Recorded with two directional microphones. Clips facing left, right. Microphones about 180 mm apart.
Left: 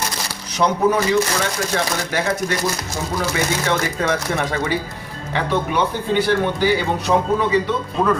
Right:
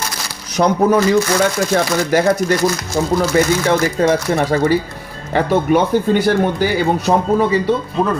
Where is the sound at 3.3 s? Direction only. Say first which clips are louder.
Right 7 dB; 40° right (ahead or behind).